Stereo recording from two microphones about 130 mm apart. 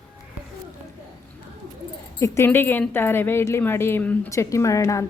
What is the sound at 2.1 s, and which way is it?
A woman's voice, 20° left (ahead or behind).